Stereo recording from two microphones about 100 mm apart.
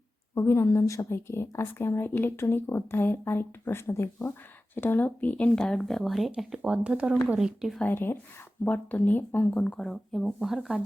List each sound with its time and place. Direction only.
0.3 s a woman's voice: 30° left (ahead or behind); by 7.8 s 5° right (ahead or behind)
7.8 s a woman's voice: 20° left (ahead or behind); by 10.8 s 5° right (ahead or behind)